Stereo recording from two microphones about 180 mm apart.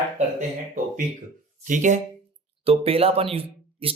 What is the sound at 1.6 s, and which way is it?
Speech, 45° right (ahead or behind).